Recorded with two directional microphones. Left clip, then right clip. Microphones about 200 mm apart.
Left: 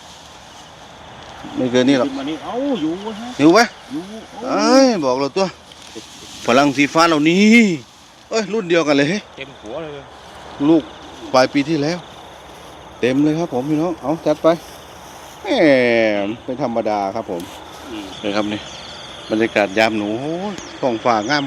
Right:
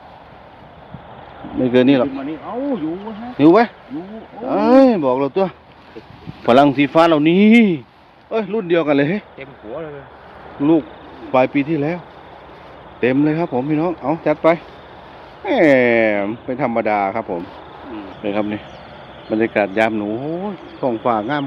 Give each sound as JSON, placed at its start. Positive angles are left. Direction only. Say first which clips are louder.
{"t": 1.6, "sound": "speech", "louder": "right 1 dB", "side_deg": -15}
{"t": 3.3, "sound": "speech", "louder": "even", "side_deg": -10}
{"t": 11.3, "sound": "speech", "louder": "left 1 dB", "side_deg": 0}
{"t": 13.0, "sound": "speech", "louder": "even", "side_deg": 0}